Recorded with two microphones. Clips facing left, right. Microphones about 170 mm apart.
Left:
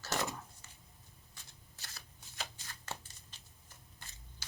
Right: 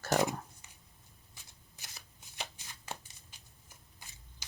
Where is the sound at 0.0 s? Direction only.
50° right (ahead or behind).